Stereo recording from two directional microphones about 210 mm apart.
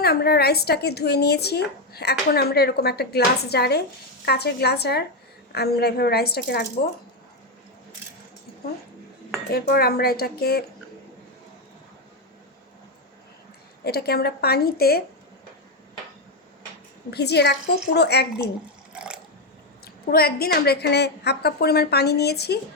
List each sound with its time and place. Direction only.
0.0 s speech: 50° left (ahead or behind)
9.5 s speech: 45° left (ahead or behind)
13.8 s speech: 50° left (ahead or behind)
17.1 s speech: 50° left (ahead or behind)
18.9 s water: 5° right (ahead or behind)
20.1 s speech: 45° left (ahead or behind)